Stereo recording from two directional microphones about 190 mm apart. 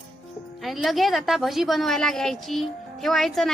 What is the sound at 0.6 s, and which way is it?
A woman's voice, centre (ahead or behind).